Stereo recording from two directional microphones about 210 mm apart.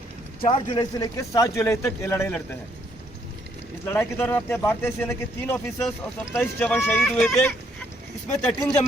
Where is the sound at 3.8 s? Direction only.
10° left (ahead or behind).